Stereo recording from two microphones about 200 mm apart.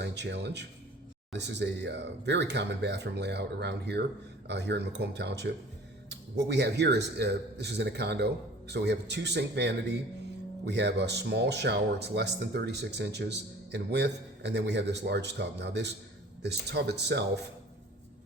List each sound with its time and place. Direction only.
0.0 s speech: 60° right (ahead or behind)